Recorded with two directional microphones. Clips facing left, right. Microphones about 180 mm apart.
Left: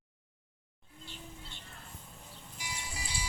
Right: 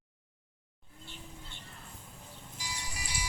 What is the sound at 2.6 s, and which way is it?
Music, 25° left (ahead or behind).